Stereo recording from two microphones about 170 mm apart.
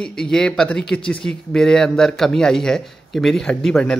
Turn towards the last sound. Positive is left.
turn(degrees=5)  # may be behind; listen again after turning